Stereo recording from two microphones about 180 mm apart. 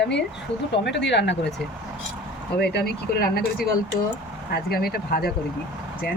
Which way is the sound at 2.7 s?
60° left (ahead or behind).